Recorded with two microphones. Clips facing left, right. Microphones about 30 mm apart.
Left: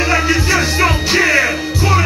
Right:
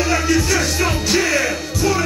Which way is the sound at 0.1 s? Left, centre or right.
Left.